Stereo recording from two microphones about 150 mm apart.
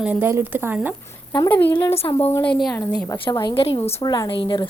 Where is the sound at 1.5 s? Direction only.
10° left (ahead or behind).